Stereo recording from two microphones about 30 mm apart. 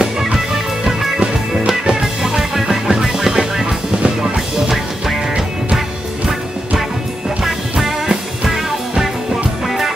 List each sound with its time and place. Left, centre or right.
0.0 s music: centre
3.6 s music: right
4.2 s music: centre
7.2 s music: centre